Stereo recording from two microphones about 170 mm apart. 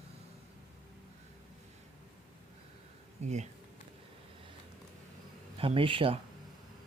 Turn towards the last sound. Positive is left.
turn(degrees=-30)  # may be behind; listen again after turning